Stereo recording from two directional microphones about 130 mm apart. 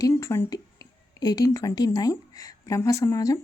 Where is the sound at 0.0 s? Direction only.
20° left (ahead or behind).